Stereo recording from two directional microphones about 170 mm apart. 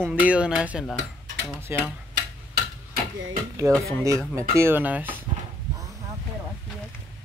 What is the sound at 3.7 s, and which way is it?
Speech, 15° right (ahead or behind).